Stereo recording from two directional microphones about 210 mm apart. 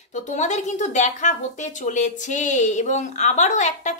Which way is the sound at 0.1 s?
35° left (ahead or behind).